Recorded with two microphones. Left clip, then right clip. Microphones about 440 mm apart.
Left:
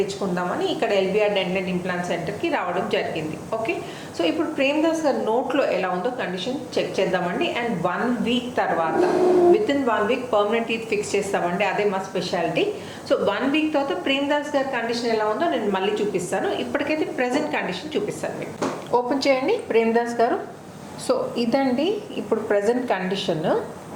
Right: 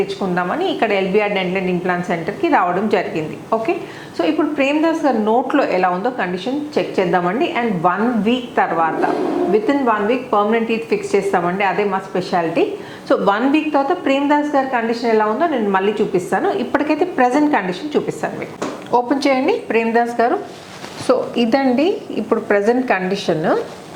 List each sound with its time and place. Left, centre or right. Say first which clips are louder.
0.3 s a woman's voice: right 6 dB; right
4.2 s a woman's voice: right 5 dB; right